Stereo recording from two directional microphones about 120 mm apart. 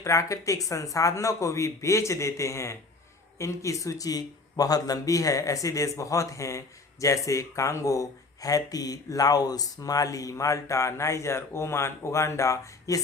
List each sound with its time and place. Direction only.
0.0 s speech: 25° left (ahead or behind)